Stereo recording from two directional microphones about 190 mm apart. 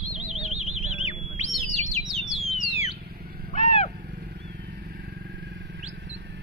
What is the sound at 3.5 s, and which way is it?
Vehicle, 40° left (ahead or behind).